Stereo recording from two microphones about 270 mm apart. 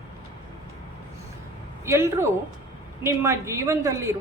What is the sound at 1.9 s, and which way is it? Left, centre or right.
A woman's voice, centre.